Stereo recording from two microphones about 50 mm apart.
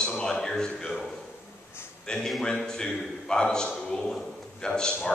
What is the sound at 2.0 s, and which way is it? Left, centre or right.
A man's voice, centre.